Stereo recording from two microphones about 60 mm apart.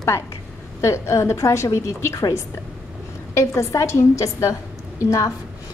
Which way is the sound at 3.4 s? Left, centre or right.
Left.